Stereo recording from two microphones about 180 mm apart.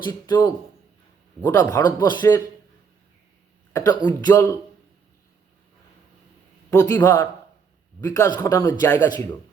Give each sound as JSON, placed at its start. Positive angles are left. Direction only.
{"t": 0.1, "sound": "speech", "side_deg": 20}
{"t": 3.7, "sound": "speech", "side_deg": 20}
{"t": 6.7, "sound": "a man's voice", "side_deg": 20}